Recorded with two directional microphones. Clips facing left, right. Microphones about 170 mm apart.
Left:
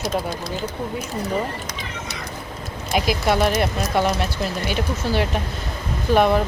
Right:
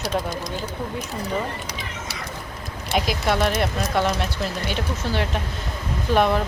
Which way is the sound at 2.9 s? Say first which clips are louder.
Left 2 dB; 5° left (ahead or behind).